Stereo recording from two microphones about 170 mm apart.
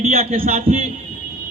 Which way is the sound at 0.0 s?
35° right (ahead or behind).